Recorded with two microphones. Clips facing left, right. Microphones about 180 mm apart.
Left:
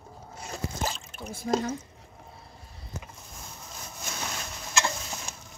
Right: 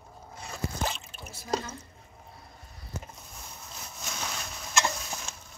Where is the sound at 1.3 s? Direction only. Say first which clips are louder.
Left 5 dB; 50° left (ahead or behind).